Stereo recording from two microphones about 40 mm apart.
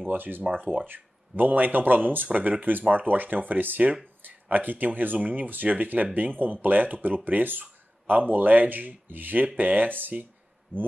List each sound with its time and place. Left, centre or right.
0.0 s speech: right
0.4 s speech: right
0.8 s speech: right